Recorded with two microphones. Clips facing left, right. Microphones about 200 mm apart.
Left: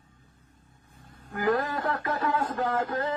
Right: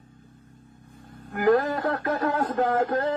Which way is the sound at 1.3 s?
55° right (ahead or behind).